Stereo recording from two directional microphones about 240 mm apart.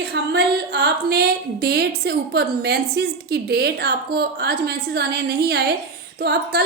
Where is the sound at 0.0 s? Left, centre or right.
Right.